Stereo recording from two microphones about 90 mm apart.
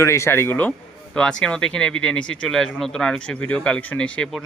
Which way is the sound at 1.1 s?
10° left (ahead or behind).